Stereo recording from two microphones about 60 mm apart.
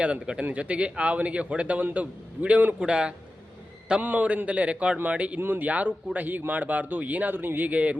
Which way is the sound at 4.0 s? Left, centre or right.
Right.